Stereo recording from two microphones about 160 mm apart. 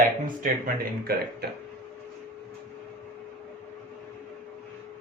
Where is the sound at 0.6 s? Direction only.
65° right (ahead or behind).